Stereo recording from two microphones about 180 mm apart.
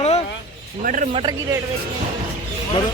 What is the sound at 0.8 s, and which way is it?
Speech, 45° right (ahead or behind).